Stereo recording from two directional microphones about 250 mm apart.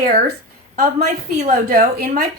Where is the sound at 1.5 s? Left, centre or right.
Right.